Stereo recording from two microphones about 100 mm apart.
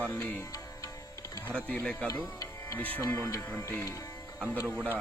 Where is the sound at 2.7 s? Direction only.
15° left (ahead or behind).